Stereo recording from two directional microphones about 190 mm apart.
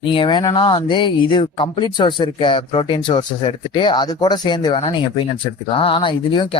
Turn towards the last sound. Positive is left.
turn(degrees=25)  # may be behind; listen again after turning